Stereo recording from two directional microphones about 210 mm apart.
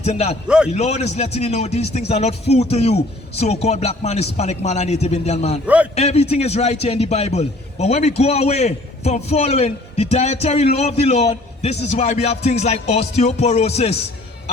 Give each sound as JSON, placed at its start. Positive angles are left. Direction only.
{"t": 0.0, "sound": "a man's voice", "side_deg": 30}
{"t": 0.4, "sound": "a man's voice", "side_deg": -5}
{"t": 0.7, "sound": "a man's voice", "side_deg": 30}
{"t": 5.6, "sound": "a man's voice", "side_deg": -5}
{"t": 5.9, "sound": "a man's voice", "side_deg": 30}